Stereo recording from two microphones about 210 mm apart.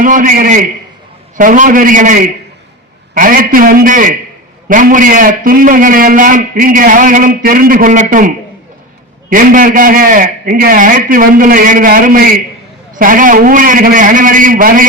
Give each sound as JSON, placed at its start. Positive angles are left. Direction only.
{"t": 0.0, "sound": "a man's voice", "side_deg": -40}
{"t": 9.3, "sound": "a man's voice", "side_deg": -40}